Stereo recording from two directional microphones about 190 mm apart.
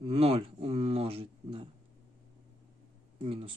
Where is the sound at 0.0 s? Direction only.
30° right (ahead or behind).